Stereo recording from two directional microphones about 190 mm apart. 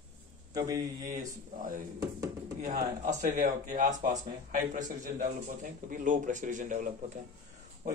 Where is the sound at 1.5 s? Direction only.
45° right (ahead or behind).